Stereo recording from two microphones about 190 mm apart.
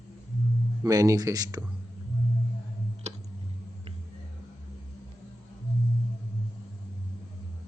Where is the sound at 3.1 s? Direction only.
35° right (ahead or behind).